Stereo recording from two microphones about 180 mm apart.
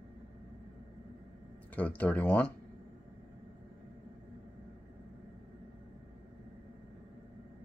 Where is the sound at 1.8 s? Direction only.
10° left (ahead or behind).